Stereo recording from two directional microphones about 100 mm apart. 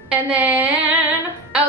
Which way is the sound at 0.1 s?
15° right (ahead or behind).